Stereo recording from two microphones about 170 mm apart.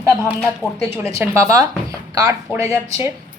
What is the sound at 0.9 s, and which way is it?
A woman's voice, 15° right (ahead or behind).